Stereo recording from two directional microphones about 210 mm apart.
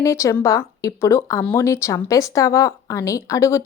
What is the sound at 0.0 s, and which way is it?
Speech, 15° left (ahead or behind).